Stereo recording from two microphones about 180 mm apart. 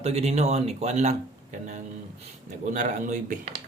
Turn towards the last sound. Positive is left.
turn(degrees=-45)  # may be behind; listen again after turning